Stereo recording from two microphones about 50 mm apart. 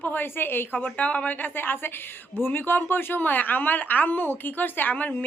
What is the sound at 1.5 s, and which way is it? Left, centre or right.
A woman's voice, left.